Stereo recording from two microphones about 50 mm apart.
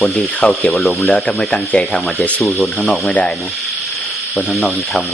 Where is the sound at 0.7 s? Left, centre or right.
Centre.